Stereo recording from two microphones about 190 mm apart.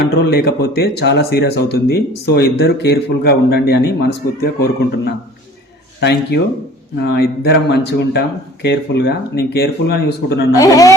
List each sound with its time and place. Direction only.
0.0 s speech: 60° left (ahead or behind)
10.6 s a man's voice: 20° left (ahead or behind)